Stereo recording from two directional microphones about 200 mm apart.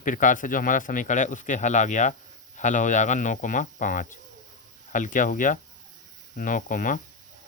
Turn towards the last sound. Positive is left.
turn(degrees=40)  # may be behind; listen again after turning